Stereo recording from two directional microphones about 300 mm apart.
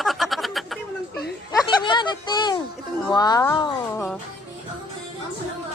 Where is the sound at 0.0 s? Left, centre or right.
Centre.